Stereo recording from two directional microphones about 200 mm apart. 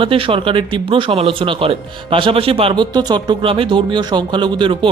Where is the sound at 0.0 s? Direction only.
25° right (ahead or behind).